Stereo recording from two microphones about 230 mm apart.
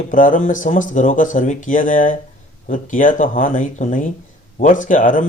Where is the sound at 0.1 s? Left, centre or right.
Left.